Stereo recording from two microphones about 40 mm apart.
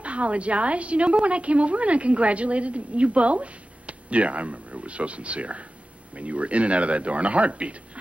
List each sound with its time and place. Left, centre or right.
0.0 s a woman's voice: right